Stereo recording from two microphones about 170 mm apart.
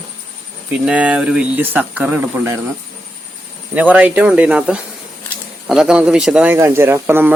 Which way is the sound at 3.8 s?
10° right (ahead or behind).